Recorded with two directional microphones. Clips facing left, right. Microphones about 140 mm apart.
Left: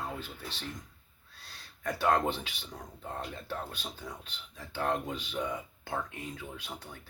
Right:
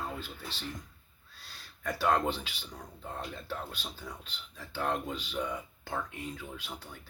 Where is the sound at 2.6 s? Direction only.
20° left (ahead or behind).